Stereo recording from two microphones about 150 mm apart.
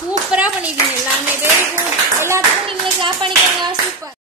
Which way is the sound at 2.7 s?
35° right (ahead or behind).